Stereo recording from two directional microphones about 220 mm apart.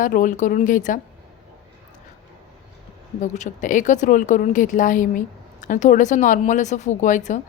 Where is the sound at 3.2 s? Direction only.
35° left (ahead or behind).